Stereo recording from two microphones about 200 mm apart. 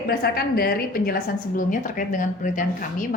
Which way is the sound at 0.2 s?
50° left (ahead or behind).